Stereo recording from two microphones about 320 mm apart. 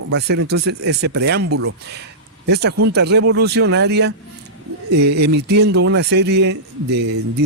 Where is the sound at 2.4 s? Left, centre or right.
Right.